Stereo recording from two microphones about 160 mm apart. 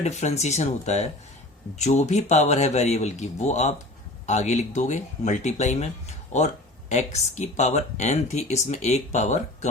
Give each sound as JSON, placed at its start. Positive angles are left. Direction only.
{"t": 0.0, "sound": "speech", "side_deg": 45}